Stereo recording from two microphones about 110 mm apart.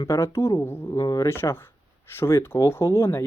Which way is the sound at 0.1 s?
25° left (ahead or behind).